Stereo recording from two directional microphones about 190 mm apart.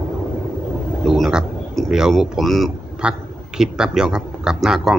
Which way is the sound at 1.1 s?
Centre (ahead or behind).